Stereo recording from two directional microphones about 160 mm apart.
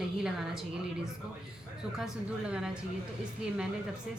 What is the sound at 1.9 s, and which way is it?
Speech, 5° right (ahead or behind).